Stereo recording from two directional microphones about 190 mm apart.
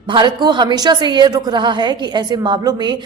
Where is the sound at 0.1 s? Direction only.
25° right (ahead or behind).